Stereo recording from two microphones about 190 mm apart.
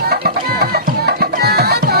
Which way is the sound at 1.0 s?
55° right (ahead or behind).